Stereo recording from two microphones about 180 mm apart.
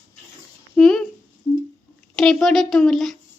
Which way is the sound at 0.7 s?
Centre (ahead or behind).